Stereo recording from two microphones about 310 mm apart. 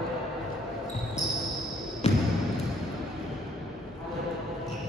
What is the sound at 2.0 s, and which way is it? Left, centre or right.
Basketball bounce, left.